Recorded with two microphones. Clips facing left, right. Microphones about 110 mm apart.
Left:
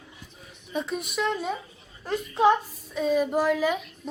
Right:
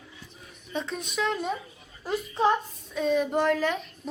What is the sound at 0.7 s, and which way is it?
A woman's voice, 5° left (ahead or behind).